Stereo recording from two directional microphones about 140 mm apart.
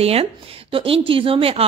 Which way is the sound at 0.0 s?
45° right (ahead or behind).